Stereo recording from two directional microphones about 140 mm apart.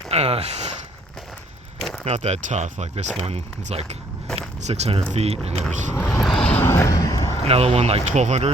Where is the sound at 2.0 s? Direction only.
50° right (ahead or behind).